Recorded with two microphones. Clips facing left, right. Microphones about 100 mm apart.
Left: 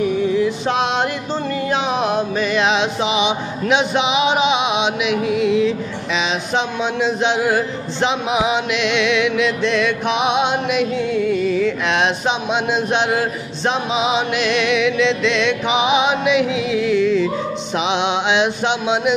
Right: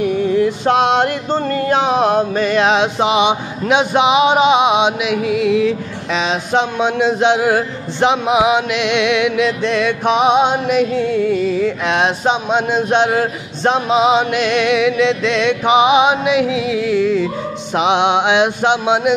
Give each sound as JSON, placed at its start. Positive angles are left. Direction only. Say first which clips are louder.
{"t": 0.0, "sound": "music", "louder": "right 2 dB", "side_deg": -50}
{"t": 5.3, "sound": "speech", "louder": "right 2 dB", "side_deg": -55}
{"t": 8.5, "sound": "music", "louder": "right 3 dB", "side_deg": -55}
{"t": 17.7, "sound": "speech", "louder": "right 6 dB", "side_deg": -55}